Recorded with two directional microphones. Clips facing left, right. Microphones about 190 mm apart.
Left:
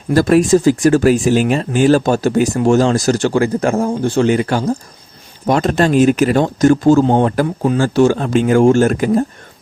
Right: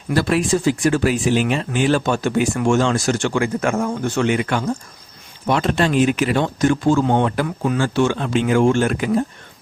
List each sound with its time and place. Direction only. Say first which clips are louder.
0.1 s speech: left 7 dB; 45° left (ahead or behind)